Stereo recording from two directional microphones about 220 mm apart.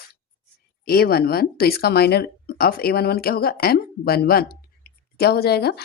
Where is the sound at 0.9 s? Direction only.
45° left (ahead or behind).